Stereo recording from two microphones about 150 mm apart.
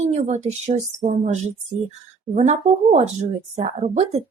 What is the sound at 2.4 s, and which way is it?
A woman's voice, 50° right (ahead or behind).